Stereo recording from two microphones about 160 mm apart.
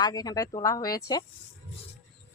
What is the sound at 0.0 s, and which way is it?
Speech, 25° left (ahead or behind).